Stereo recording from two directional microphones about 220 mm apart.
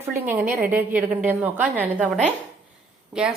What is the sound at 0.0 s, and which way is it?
A woman's voice, 10° right (ahead or behind).